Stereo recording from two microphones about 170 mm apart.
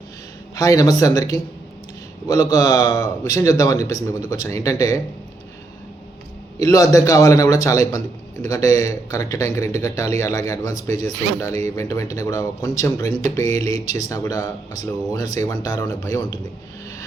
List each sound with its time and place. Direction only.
0.5 s a man's voice: 20° left (ahead or behind)
6.6 s a man's voice: 20° left (ahead or behind)